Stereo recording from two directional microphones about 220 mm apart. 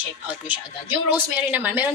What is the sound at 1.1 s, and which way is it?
Speech, 5° right (ahead or behind).